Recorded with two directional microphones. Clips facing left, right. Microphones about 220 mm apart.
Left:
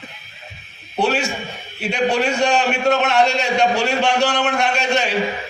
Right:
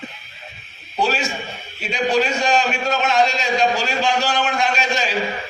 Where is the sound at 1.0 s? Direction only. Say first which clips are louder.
Left 2 dB; 65° left (ahead or behind).